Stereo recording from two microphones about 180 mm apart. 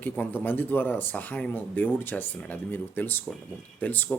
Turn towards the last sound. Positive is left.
turn(degrees=10)  # may be behind; listen again after turning